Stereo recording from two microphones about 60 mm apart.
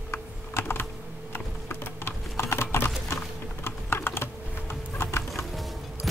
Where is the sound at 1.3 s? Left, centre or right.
Left.